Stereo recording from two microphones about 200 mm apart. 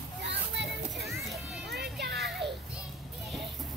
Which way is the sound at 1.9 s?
55° right (ahead or behind).